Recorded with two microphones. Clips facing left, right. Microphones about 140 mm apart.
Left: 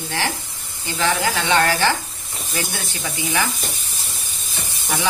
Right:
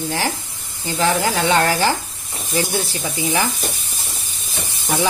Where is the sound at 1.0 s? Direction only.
40° right (ahead or behind).